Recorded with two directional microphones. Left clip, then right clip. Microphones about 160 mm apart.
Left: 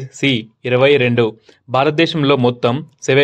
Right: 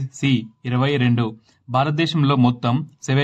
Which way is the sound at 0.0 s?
25° left (ahead or behind).